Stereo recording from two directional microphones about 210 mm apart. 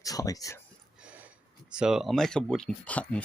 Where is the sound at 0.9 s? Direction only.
5° right (ahead or behind).